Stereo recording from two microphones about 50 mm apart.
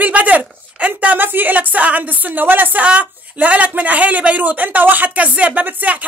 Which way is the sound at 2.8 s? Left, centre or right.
Right.